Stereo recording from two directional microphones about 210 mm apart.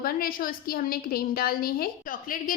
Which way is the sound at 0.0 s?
45° left (ahead or behind).